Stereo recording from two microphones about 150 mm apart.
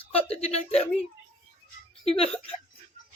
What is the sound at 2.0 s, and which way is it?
Speech, 40° left (ahead or behind).